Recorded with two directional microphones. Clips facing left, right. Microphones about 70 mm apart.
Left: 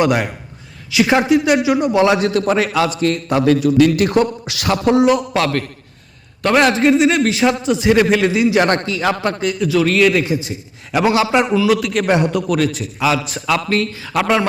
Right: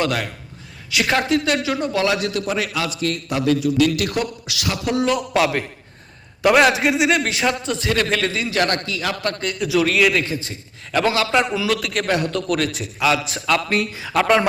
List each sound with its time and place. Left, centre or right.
0.0 s a man's voice: centre
0.9 s a woman's voice: centre; by 4.9 s left
5.0 s a man's voice: centre
7.8 s a man's voice: centre
9.2 s a man's voice: centre
9.5 s a man's voice: centre
10.2 s a man's voice: centre
11.7 s a man's voice: centre
12.0 s a man's voice: left
12.3 s a man's voice: centre
13.7 s a man's voice: centre
14.1 s a man's voice: centre